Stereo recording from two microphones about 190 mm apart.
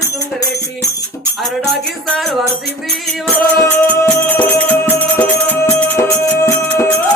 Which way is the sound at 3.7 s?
10° left (ahead or behind).